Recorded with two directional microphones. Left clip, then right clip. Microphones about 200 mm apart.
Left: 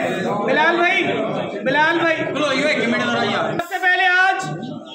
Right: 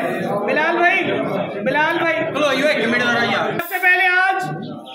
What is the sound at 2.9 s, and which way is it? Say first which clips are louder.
Speech: right 2 dB; 15° right (ahead or behind).